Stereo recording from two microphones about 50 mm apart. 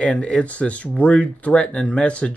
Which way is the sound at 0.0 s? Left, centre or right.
Centre.